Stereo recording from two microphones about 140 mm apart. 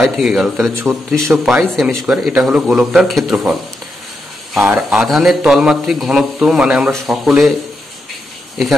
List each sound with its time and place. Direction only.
0.0 s a man's voice: centre (ahead or behind)
4.6 s a man's voice: 5° right (ahead or behind)